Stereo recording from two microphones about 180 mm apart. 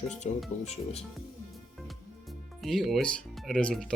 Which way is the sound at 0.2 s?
40° left (ahead or behind).